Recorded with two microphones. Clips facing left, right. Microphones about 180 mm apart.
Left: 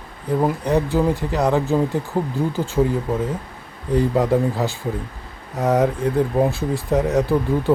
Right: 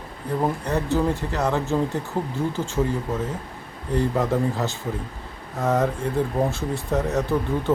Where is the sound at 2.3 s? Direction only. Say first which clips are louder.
Left 3 dB; 35° left (ahead or behind).